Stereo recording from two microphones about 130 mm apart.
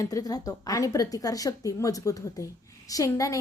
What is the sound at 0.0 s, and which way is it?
A woman's voice, 25° left (ahead or behind).